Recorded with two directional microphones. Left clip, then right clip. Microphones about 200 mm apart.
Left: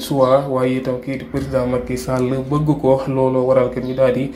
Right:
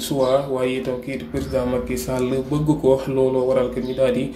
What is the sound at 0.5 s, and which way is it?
Speech, 15° left (ahead or behind).